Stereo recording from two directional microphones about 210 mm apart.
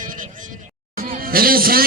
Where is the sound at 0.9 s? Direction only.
45° right (ahead or behind).